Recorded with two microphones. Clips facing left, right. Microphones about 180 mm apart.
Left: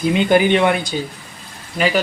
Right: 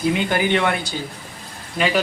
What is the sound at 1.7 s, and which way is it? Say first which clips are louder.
Speech: left 2 dB; centre (ahead or behind).